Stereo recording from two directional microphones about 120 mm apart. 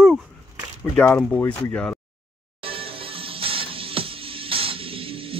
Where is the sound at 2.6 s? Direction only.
50° right (ahead or behind).